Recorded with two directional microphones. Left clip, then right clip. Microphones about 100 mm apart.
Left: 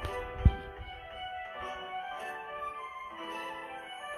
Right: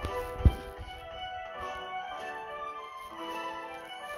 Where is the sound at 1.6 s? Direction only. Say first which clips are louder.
Right 2 dB; 30° right (ahead or behind).